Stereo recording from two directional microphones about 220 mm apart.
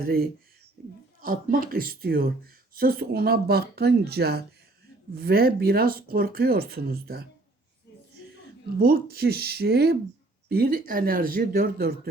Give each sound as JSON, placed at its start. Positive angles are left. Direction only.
{"t": 0.0, "sound": "speech", "side_deg": -45}
{"t": 8.8, "sound": "speech", "side_deg": -45}